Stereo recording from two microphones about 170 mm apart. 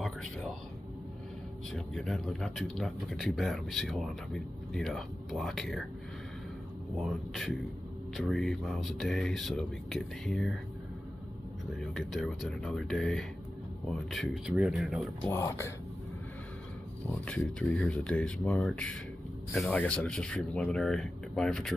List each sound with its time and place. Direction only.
0.0 s a sound: 5° left (ahead or behind)
1.7 s speech: centre (ahead or behind)
7.0 s speech: centre (ahead or behind)
11.8 s speech: centre (ahead or behind)
15.2 s speech: 15° left (ahead or behind)
17.2 s speech: 5° left (ahead or behind)